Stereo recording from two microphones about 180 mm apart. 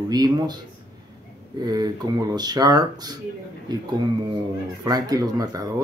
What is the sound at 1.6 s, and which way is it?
Speech, 20° right (ahead or behind).